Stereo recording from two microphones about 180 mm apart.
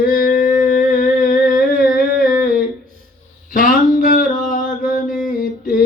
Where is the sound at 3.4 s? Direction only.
50° left (ahead or behind).